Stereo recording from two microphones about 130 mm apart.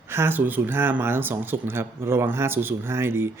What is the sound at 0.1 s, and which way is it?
Speech, 20° right (ahead or behind).